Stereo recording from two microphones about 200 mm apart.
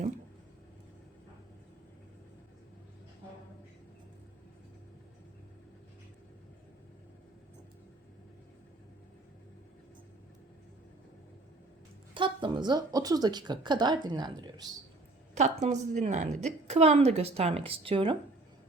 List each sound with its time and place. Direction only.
12.1 s a woman's voice: 25° right (ahead or behind)
15.4 s a woman's voice: 35° right (ahead or behind)